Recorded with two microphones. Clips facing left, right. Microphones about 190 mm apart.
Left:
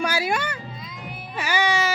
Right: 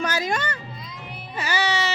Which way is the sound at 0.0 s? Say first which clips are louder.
Left 1 dB; 10° left (ahead or behind).